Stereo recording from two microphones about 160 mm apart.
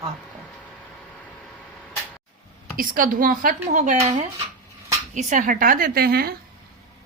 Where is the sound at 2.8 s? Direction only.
60° right (ahead or behind).